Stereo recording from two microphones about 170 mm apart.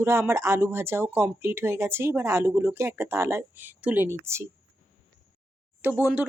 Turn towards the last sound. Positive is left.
turn(degrees=-10)  # may be behind; listen again after turning